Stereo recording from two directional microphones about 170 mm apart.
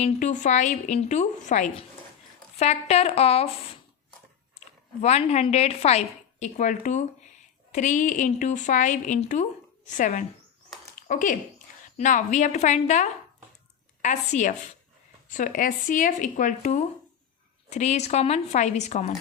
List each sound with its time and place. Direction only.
0.0 s a woman's voice: 45° left (ahead or behind)
5.0 s a woman's voice: 40° left (ahead or behind)